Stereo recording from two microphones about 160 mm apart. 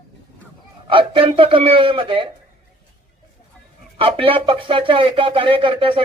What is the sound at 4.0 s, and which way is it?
Speech, 35° right (ahead or behind).